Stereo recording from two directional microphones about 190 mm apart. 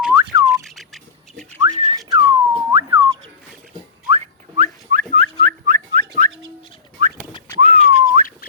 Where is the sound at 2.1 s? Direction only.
20° right (ahead or behind).